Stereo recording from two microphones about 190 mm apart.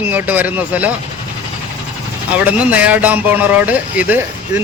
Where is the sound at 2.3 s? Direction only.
5° right (ahead or behind).